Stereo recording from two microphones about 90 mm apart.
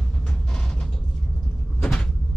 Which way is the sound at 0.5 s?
10° left (ahead or behind).